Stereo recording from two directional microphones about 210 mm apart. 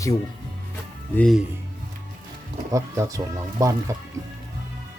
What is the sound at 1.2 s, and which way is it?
Speech, centre (ahead or behind).